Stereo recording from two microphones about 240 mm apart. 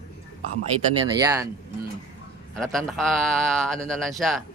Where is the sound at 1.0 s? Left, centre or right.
Centre.